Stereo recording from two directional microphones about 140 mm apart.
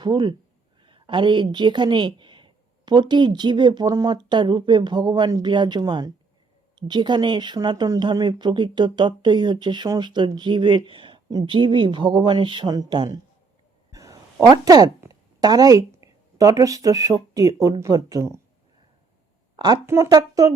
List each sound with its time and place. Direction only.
0.0 s speech: 30° right (ahead or behind)
13.9 s a sound: 25° right (ahead or behind)
14.4 s speech: 25° right (ahead or behind)
19.5 s a woman's voice: 30° right (ahead or behind)